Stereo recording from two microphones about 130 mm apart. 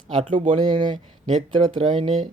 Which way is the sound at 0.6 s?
35° right (ahead or behind).